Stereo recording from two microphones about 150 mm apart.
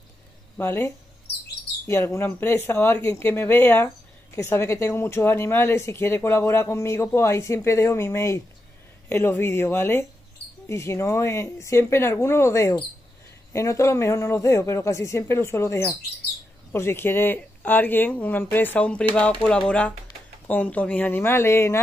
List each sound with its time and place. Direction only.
0.6 s speech: 15° left (ahead or behind)